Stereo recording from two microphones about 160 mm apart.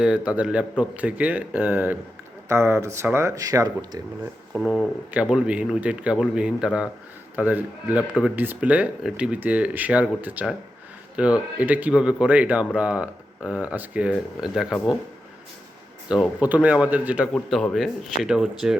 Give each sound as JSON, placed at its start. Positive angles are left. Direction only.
{"t": 0.0, "sound": "speech", "side_deg": -10}
{"t": 4.5, "sound": "speech", "side_deg": 0}
{"t": 16.0, "sound": "speech", "side_deg": -5}